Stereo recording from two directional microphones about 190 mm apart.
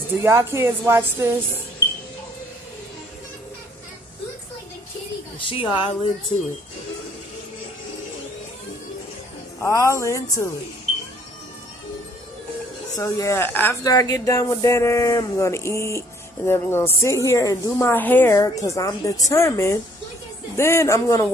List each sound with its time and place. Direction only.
0.2 s a woman's voice: 15° right (ahead or behind)
5.5 s speech: 25° left (ahead or behind)
9.6 s a woman's voice: 15° left (ahead or behind)
12.9 s a woman's voice: 15° left (ahead or behind)